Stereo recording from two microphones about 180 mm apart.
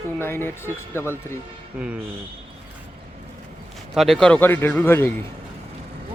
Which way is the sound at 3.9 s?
Centre (ahead or behind).